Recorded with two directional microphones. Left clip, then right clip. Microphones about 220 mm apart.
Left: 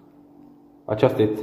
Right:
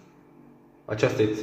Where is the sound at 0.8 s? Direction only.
30° left (ahead or behind).